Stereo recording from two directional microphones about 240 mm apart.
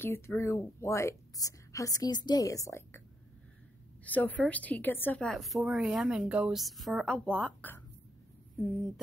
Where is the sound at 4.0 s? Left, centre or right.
Centre.